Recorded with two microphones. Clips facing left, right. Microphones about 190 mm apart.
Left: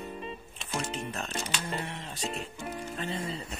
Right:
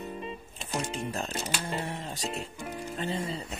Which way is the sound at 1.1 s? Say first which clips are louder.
Right 2 dB; 30° right (ahead or behind).